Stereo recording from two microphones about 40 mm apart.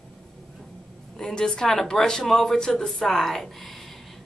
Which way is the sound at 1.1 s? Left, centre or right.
Centre.